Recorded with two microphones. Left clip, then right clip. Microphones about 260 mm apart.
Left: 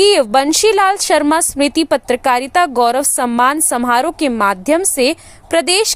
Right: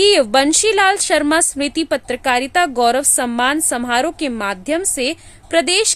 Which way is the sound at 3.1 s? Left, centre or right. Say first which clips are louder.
Left 2 dB; centre.